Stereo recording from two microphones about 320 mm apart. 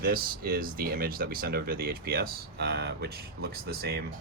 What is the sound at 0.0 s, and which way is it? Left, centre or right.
Speech, right.